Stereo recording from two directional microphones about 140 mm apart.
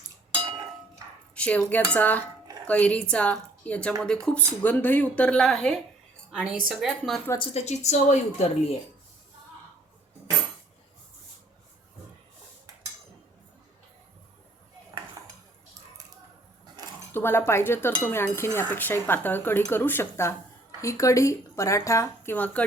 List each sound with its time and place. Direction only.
0.3 s a sound: 35° right (ahead or behind)
1.4 s a woman's voice: 10° left (ahead or behind)
6.3 s a woman's voice: 5° right (ahead or behind)
7.5 s a woman's voice: 50° left (ahead or behind)
17.1 s a woman's voice: 15° left (ahead or behind)